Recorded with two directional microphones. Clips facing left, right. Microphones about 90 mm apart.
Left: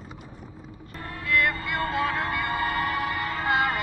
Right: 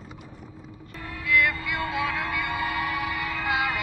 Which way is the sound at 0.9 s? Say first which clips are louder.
Right 1 dB; 40° left (ahead or behind).